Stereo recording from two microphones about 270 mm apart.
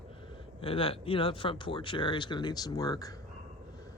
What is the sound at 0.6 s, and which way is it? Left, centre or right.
Speech, centre.